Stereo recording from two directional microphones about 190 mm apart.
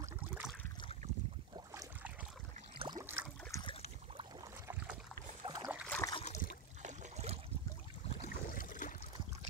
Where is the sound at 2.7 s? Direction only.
20° right (ahead or behind).